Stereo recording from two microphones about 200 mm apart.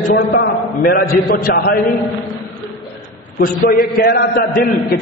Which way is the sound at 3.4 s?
45° left (ahead or behind).